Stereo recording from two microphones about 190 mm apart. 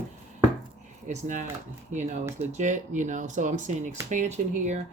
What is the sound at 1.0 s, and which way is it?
Speech, 40° right (ahead or behind).